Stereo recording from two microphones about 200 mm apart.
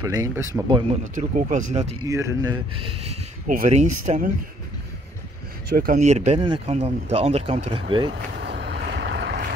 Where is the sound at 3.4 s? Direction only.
40° right (ahead or behind).